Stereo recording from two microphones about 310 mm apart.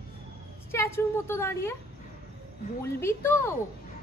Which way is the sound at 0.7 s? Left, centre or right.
Centre.